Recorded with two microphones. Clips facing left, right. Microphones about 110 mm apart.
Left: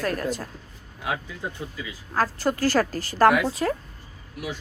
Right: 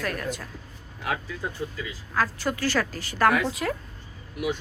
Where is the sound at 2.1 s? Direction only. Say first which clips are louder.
Left 3 dB; 35° left (ahead or behind).